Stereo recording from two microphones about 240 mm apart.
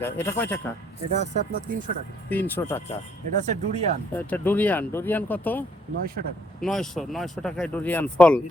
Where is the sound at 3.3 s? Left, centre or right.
Right.